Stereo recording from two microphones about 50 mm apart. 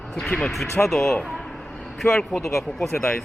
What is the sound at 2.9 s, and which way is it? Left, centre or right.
Speech, left.